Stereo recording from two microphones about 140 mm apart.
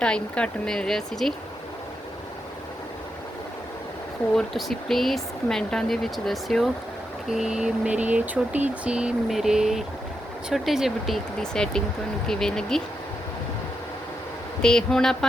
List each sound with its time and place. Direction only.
0.0 s speech: 5° left (ahead or behind)
4.4 s speech: centre (ahead or behind)
7.3 s a sound: 5° right (ahead or behind)
10.5 s speech: centre (ahead or behind)
14.6 s speech: 5° left (ahead or behind)